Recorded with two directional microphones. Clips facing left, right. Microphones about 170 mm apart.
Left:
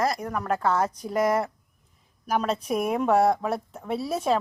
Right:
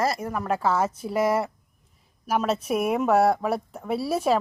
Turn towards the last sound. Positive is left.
turn(degrees=-5)  # may be behind; listen again after turning